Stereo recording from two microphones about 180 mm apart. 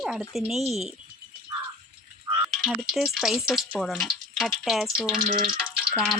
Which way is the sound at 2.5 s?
Centre (ahead or behind).